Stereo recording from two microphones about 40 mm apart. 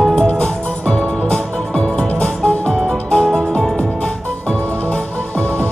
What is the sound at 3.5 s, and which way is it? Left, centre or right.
Music, centre.